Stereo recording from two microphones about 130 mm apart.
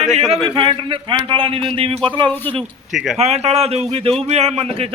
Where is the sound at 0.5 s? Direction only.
40° right (ahead or behind).